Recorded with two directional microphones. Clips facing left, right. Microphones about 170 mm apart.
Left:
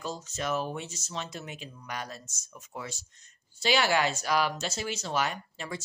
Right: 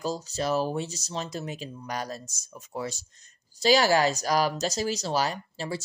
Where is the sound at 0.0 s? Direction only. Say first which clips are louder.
Right 5 dB; 35° right (ahead or behind).